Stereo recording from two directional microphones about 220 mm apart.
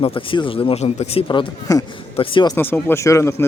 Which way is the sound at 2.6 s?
10° left (ahead or behind).